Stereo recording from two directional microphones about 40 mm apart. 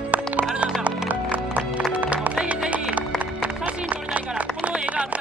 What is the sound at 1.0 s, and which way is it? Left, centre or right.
Music, right.